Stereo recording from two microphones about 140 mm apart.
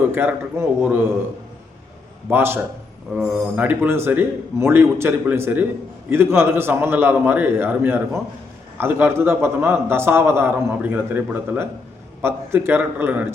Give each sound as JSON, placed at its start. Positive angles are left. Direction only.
{"t": 0.1, "sound": "a man's voice", "side_deg": -15}
{"t": 2.3, "sound": "a man's voice", "side_deg": -15}